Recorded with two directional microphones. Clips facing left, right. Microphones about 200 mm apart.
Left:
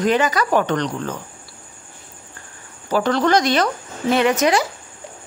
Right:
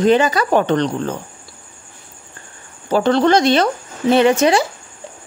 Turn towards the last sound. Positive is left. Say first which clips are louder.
# right 4 dB
turn(degrees=-30)  # may be behind; listen again after turning